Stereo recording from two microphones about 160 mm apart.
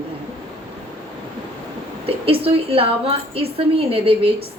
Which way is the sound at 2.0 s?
35° right (ahead or behind).